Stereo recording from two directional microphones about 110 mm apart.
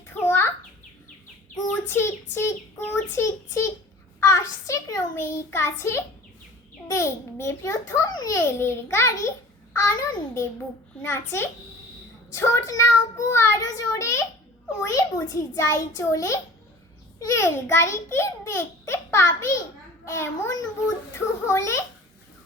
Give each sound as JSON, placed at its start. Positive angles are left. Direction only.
{"t": 0.3, "sound": "a sound", "side_deg": 20}
{"t": 1.9, "sound": "a child's voice", "side_deg": 25}
{"t": 6.8, "sound": "a child's voice", "side_deg": 25}